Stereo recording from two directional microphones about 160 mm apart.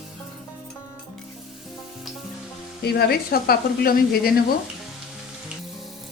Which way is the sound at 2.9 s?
80° left.